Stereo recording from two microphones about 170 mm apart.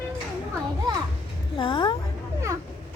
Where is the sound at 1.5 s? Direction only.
30° left (ahead or behind).